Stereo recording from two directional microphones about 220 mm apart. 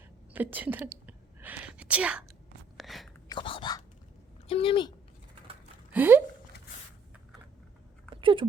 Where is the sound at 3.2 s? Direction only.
20° left (ahead or behind).